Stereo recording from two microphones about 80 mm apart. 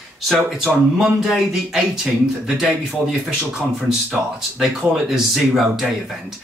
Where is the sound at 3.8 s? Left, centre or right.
Centre.